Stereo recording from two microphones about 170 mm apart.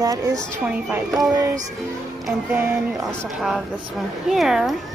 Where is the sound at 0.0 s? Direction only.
20° right (ahead or behind).